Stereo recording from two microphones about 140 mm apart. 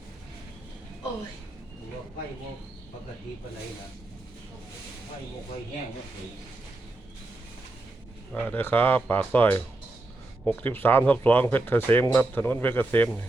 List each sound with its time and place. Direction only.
8.4 s speech: 15° left (ahead or behind)